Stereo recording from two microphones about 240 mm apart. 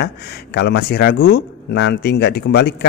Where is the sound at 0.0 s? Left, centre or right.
Left.